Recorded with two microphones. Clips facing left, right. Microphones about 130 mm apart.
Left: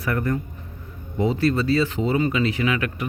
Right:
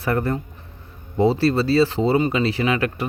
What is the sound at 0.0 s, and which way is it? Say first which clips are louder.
Speech: right 2 dB; 30° right (ahead or behind).